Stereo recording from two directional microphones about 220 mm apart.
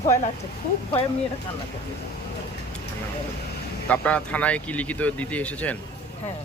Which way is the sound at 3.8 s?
5° left (ahead or behind).